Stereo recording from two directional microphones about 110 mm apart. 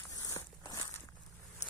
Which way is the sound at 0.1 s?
30° left (ahead or behind).